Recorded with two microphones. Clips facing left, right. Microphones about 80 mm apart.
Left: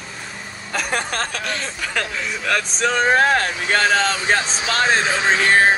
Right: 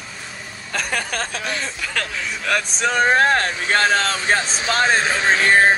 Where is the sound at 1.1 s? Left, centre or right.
Left.